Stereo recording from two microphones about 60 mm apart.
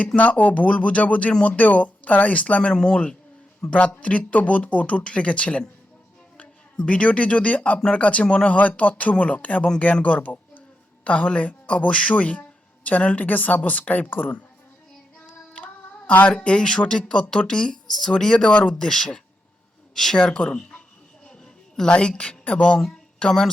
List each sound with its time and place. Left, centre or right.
0.2 s speech: left
6.7 s speech: left
15.5 s music: centre
16.3 s speech: centre
20.6 s a sound: centre
21.9 s speech: centre
23.2 s speech: centre